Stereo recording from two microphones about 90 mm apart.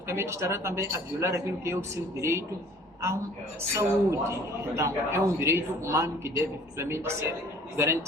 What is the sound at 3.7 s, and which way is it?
A man's voice, 30° right (ahead or behind).